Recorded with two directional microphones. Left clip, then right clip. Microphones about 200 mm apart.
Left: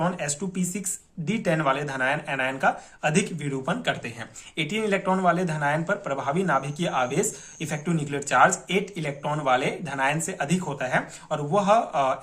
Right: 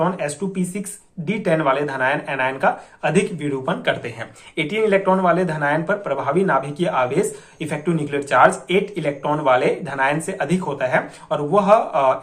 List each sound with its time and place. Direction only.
0.0 s speech: 35° left (ahead or behind)